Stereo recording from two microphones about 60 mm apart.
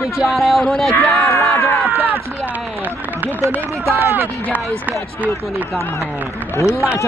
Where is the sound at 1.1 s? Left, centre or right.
Left.